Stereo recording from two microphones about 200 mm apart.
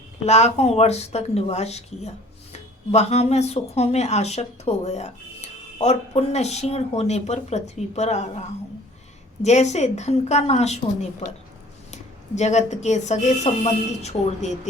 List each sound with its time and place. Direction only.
0.3 s a woman's voice: 35° left (ahead or behind)